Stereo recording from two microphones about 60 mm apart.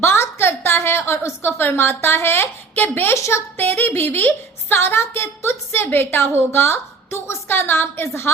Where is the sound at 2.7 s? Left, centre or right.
Left.